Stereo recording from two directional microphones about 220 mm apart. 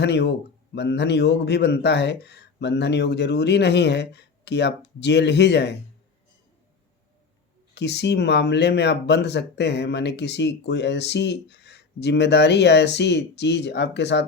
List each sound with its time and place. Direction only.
0.0 s speech: 50° left (ahead or behind)
7.8 s speech: 50° left (ahead or behind)